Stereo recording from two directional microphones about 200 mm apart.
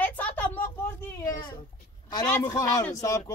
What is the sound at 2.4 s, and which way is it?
Speech, 15° left (ahead or behind).